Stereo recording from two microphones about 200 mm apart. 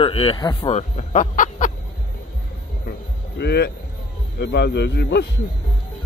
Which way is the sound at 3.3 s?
55° left (ahead or behind).